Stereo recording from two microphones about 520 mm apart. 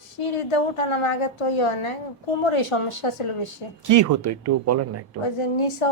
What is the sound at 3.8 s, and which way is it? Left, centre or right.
Speech, right.